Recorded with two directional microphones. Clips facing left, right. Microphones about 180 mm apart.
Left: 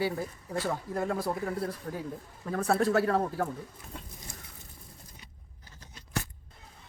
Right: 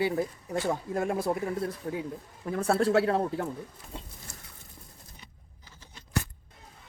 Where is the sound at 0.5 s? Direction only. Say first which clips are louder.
Right 3 dB; 20° right (ahead or behind).